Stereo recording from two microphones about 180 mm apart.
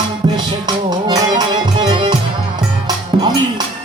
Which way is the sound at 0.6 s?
25° right (ahead or behind).